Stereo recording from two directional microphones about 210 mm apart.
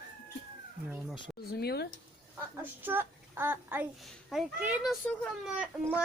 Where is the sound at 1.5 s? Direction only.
50° left (ahead or behind).